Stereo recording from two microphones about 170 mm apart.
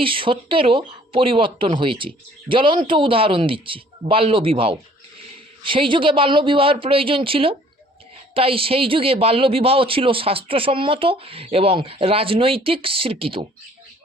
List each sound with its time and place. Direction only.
0.0 s speech: 30° right (ahead or behind)